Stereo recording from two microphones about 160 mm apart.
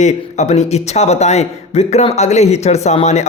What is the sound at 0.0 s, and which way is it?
Speech, 45° left (ahead or behind).